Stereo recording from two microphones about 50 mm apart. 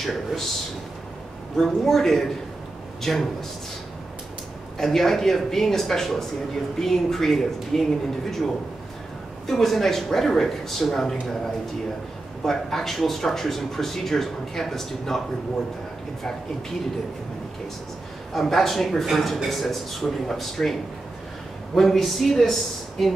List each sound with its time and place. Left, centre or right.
0.0 s speech: centre
1.6 s speech: centre
4.7 s speech: centre
9.5 s speech: centre
18.3 s speech: centre
21.7 s speech: centre